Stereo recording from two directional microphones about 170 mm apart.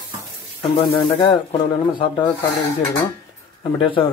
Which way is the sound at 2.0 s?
30° left (ahead or behind).